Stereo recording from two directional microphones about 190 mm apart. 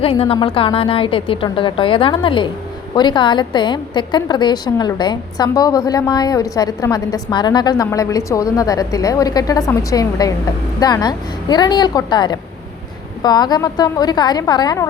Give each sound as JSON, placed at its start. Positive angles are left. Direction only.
{"t": 0.0, "sound": "a woman's voice", "side_deg": 30}